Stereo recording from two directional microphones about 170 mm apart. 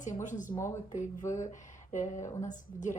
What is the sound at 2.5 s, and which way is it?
Speech, 45° left (ahead or behind).